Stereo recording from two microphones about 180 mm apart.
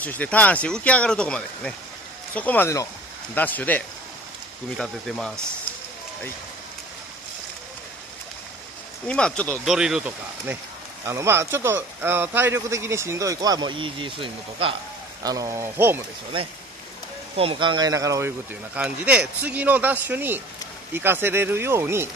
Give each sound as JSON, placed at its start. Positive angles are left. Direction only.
{"t": 0.0, "sound": "speech", "side_deg": 10}
{"t": 9.0, "sound": "speech", "side_deg": 5}
{"t": 9.8, "sound": "speech", "side_deg": -5}
{"t": 15.2, "sound": "speech", "side_deg": -20}
{"t": 17.4, "sound": "speech", "side_deg": -30}
{"t": 18.8, "sound": "speech", "side_deg": -5}